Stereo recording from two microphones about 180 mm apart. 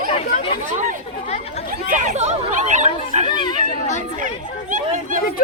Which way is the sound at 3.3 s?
25° left (ahead or behind).